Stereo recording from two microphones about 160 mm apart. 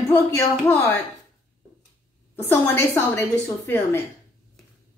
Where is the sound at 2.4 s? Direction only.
15° left (ahead or behind).